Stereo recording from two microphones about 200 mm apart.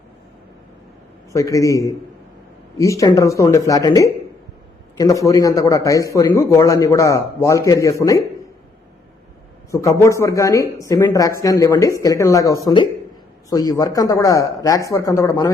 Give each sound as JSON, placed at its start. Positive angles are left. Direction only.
{"t": 1.3, "sound": "a man's voice", "side_deg": 15}
{"t": 9.7, "sound": "a man's voice", "side_deg": 15}